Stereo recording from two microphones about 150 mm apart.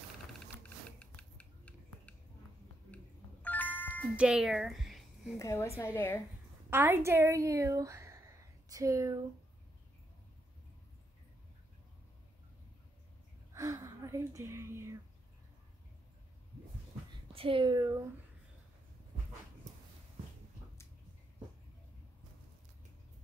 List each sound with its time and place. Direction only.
0.8 s a sound: 10° left (ahead or behind)
3.4 s music: 10° left (ahead or behind)
4.2 s a woman's voice: 5° right (ahead or behind)
5.4 s a woman's voice: 20° left (ahead or behind)
6.7 s a woman's voice: 15° right (ahead or behind)
13.5 s a sound: 20° right (ahead or behind)
17.3 s speech: 40° right (ahead or behind); by 18.0 s 20° right (ahead or behind)